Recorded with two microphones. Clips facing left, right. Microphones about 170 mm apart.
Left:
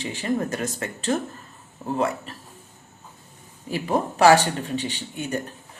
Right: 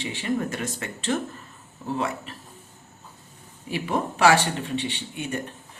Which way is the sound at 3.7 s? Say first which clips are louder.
Left 2 dB; 40° left (ahead or behind).